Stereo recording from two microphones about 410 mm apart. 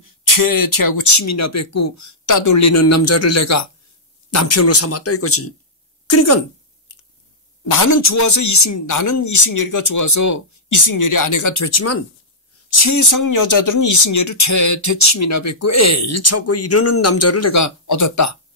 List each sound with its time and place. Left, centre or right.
0.0 s a woman's voice: left
6.9 s squish: left
7.6 s speech: left